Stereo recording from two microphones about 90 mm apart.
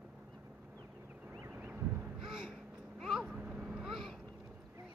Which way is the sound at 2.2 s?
5° right (ahead or behind).